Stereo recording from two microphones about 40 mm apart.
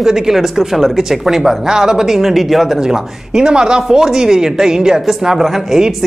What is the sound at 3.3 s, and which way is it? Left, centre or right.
Speech, centre.